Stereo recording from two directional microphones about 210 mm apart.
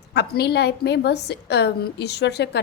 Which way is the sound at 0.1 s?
50° left (ahead or behind).